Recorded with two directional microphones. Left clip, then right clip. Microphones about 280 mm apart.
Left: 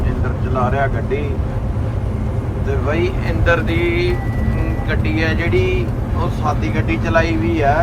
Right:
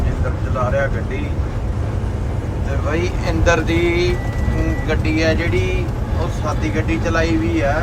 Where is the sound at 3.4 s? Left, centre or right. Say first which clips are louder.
Even; centre.